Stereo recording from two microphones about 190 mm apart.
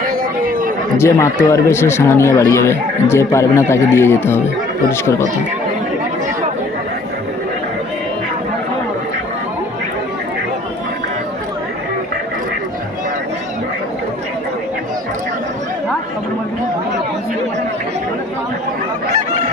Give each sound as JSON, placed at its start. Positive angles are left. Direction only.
{"t": 0.0, "sound": "chatter", "side_deg": -50}
{"t": 0.9, "sound": "speech", "side_deg": 15}